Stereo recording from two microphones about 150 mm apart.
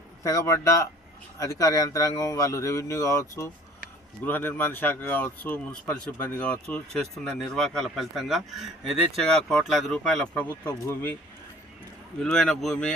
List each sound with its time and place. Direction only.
0.2 s speech: 20° left (ahead or behind)
12.2 s speech: 5° left (ahead or behind)